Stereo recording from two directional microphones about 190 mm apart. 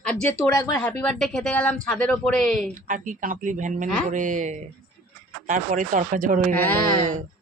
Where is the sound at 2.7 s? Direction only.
45° right (ahead or behind).